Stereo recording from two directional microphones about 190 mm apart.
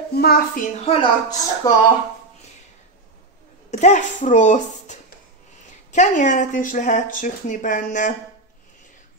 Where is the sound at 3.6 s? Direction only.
40° left (ahead or behind).